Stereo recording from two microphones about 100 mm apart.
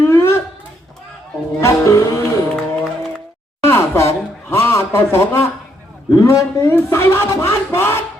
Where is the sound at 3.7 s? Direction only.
25° left (ahead or behind).